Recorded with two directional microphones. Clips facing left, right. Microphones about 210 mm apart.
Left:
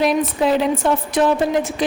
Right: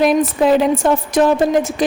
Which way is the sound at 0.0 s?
50° right (ahead or behind).